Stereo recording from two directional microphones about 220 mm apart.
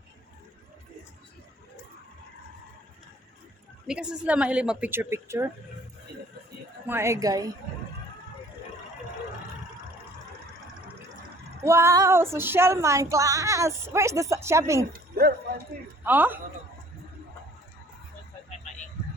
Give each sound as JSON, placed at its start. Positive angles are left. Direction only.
{"t": 3.8, "sound": "a woman's voice", "side_deg": -5}
{"t": 6.8, "sound": "female singing", "side_deg": -10}
{"t": 11.6, "sound": "female singing", "side_deg": -10}
{"t": 14.9, "sound": "a sound", "side_deg": -45}
{"t": 16.0, "sound": "female singing", "side_deg": -10}